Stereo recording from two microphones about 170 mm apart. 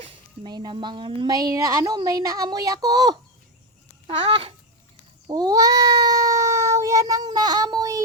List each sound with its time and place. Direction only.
0.0 s speech: 25° right (ahead or behind)
4.0 s babbling: 30° right (ahead or behind)
5.3 s speech: 20° right (ahead or behind)